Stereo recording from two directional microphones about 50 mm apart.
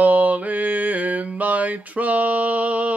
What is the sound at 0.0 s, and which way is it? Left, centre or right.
Mantra, right.